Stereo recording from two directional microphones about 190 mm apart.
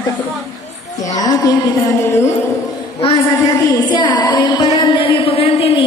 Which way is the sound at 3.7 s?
20° left (ahead or behind).